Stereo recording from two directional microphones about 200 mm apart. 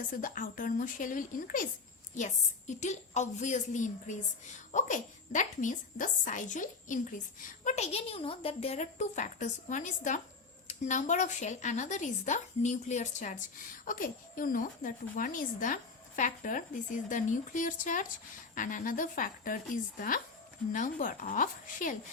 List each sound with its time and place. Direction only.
0.1 s a woman's voice: 40° left (ahead or behind)